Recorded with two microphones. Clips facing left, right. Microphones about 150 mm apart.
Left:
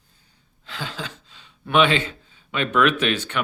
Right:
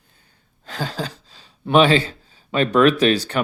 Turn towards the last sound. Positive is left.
turn(degrees=-35)  # may be behind; listen again after turning